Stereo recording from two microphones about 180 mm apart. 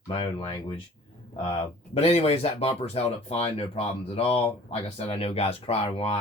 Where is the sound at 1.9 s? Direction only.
35° left (ahead or behind).